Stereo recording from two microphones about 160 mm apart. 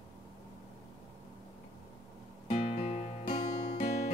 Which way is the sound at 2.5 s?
40° left (ahead or behind).